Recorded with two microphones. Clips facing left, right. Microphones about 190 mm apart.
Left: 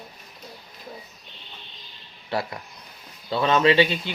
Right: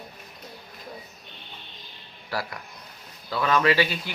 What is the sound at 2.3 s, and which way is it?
Speech, 25° left (ahead or behind).